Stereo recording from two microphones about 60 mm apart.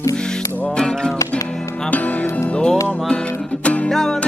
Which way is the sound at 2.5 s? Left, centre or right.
Centre.